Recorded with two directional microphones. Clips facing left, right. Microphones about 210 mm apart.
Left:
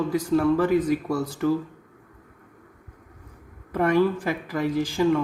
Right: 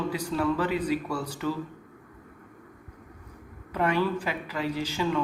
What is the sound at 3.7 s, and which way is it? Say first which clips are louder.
Speech: left 5 dB; 50° left (ahead or behind).